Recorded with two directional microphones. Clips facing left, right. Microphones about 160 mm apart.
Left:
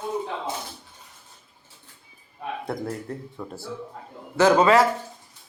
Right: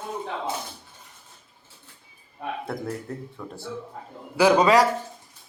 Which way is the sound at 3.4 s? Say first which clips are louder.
Left 2 dB; 10° left (ahead or behind).